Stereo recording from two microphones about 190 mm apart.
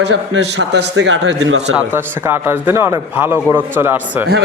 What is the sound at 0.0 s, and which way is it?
A man's voice, 65° right (ahead or behind).